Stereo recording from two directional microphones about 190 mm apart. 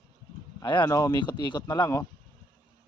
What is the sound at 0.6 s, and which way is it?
Speech, 25° left (ahead or behind).